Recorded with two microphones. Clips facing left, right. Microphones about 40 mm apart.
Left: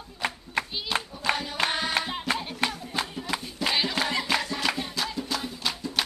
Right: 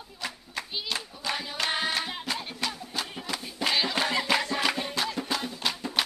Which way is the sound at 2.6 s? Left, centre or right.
Left.